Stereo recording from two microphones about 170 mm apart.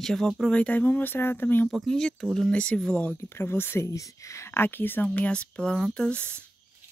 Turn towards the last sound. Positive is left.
turn(degrees=5)  # may be behind; listen again after turning